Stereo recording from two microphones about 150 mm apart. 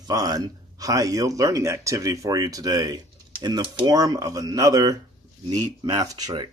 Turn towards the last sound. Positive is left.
turn(degrees=-30)  # may be behind; listen again after turning